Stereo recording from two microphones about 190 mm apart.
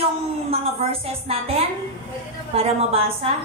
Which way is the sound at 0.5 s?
30° right (ahead or behind).